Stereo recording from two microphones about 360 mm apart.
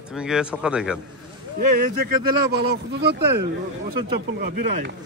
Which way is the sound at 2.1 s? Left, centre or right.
Right.